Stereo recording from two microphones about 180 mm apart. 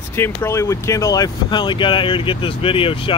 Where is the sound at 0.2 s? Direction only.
15° left (ahead or behind).